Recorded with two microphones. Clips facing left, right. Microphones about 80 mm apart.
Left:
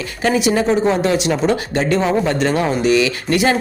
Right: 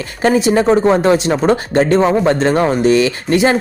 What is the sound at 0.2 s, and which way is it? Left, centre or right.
Speech, right.